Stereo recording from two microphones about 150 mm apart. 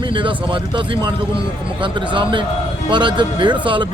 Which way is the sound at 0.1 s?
35° right (ahead or behind).